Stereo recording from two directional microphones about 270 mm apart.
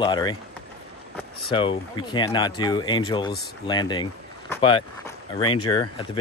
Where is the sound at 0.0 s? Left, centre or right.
Centre.